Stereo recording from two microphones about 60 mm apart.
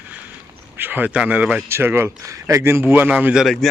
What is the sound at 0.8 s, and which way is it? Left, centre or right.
Speech, right.